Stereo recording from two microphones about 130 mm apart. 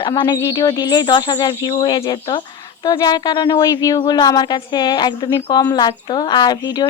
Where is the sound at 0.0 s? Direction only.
35° left (ahead or behind).